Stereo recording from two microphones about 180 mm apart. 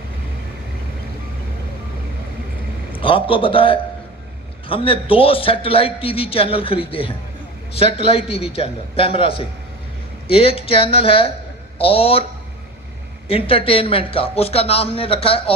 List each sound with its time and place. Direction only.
2.9 s a man's voice: 30° left (ahead or behind)
13.2 s a man's voice: 30° left (ahead or behind)